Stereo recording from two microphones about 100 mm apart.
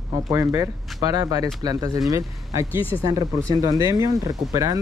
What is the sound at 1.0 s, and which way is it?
Speech, 40° right (ahead or behind).